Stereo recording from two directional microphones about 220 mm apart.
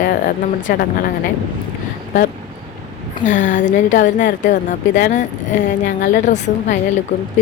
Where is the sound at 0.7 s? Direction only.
40° left (ahead or behind).